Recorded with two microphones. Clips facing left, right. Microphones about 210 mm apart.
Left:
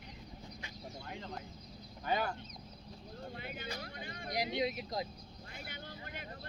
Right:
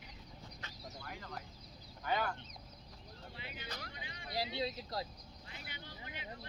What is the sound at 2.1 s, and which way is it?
Speech, 20° left (ahead or behind).